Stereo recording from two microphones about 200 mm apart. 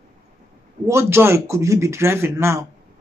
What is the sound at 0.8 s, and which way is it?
Speech, 15° right (ahead or behind).